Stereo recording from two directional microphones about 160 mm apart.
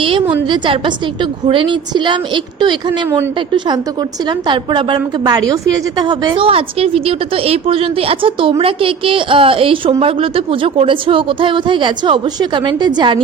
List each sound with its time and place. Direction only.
0.0 s a sound: 35° right (ahead or behind)
0.4 s a woman's voice: 30° right (ahead or behind)
4.3 s a woman's voice: 30° right (ahead or behind)